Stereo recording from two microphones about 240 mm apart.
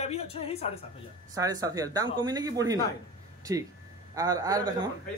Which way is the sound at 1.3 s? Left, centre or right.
Centre.